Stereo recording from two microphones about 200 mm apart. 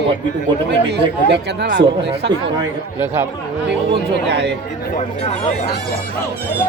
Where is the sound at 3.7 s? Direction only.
60° right (ahead or behind).